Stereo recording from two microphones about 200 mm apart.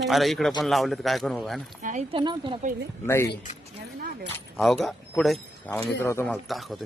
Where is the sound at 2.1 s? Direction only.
25° right (ahead or behind).